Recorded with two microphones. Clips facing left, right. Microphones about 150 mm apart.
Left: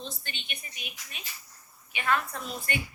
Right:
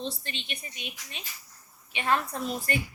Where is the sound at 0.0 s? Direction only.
30° right (ahead or behind).